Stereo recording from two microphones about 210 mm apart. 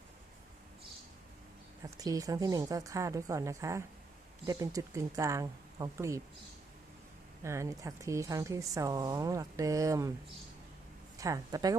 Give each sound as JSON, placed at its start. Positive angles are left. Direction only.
{"t": 1.8, "sound": "a woman's voice", "side_deg": -15}
{"t": 7.4, "sound": "a woman's voice", "side_deg": -15}
{"t": 11.2, "sound": "a woman's voice", "side_deg": -15}